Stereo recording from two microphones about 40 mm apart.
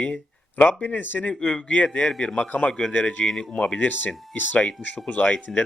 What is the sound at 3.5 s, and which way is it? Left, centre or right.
Speech, left.